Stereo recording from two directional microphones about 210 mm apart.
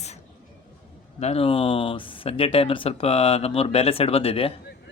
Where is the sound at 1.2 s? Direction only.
30° left (ahead or behind).